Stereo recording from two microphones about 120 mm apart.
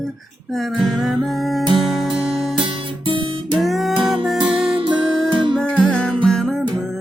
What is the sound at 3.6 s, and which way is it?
Music, centre (ahead or behind).